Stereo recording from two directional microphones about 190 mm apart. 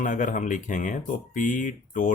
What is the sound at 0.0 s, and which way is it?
Speech, 45° left (ahead or behind).